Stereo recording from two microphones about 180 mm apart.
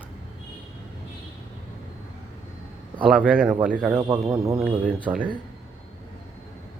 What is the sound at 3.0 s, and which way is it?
Speech, 5° right (ahead or behind).